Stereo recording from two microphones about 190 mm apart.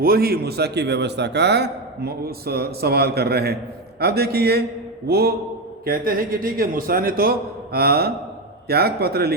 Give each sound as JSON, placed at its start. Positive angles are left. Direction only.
{"t": 0.0, "sound": "a man's voice", "side_deg": -50}